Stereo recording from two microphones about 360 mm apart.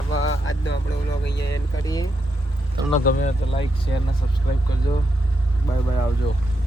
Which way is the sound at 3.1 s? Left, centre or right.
Centre.